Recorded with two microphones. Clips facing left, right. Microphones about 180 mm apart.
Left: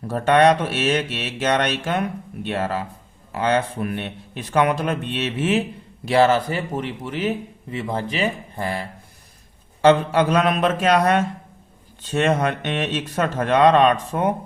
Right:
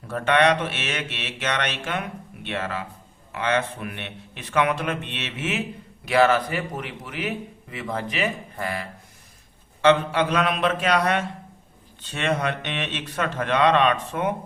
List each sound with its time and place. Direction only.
0.1 s mantra: 40° left (ahead or behind)
6.1 s a man's voice: 30° left (ahead or behind)
9.8 s a man's voice: 40° left (ahead or behind)